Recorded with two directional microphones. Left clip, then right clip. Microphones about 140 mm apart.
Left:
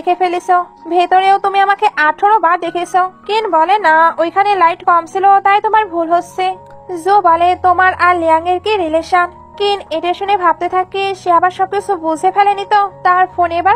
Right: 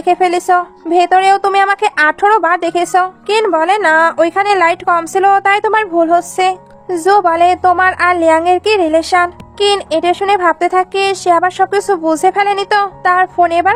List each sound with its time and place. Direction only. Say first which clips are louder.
0.0 s speech: right 2 dB; 35° right (ahead or behind)